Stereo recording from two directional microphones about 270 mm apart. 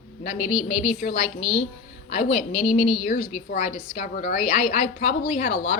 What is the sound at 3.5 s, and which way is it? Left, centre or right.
Speech, left.